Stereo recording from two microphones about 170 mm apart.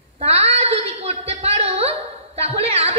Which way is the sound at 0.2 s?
35° right (ahead or behind).